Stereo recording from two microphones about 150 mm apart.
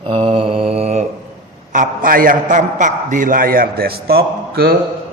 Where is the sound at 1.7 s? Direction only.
65° right (ahead or behind).